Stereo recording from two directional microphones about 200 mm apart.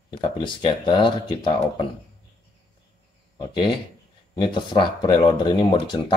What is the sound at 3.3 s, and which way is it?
Speech, 20° left (ahead or behind).